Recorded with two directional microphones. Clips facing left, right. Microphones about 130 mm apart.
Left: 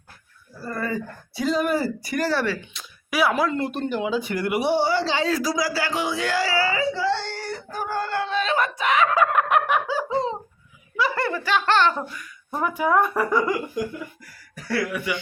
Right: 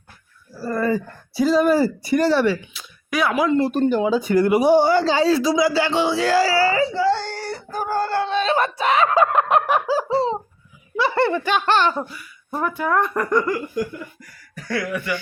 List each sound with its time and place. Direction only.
0.6 s speech: 40° right (ahead or behind); by 2.6 s 20° right (ahead or behind)
2.7 s a sound: 5° left (ahead or behind)
3.3 s speech: 20° right (ahead or behind)
3.6 s speech: 40° right (ahead or behind); by 12.6 s 10° right (ahead or behind)
12.6 s speech: 10° left (ahead or behind)